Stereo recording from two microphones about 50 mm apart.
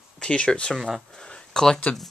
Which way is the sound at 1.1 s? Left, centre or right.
Centre.